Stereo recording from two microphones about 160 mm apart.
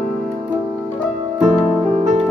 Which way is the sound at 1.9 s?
45° right (ahead or behind).